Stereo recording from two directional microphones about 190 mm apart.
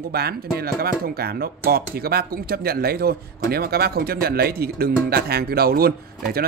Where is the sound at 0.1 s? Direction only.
55° right (ahead or behind).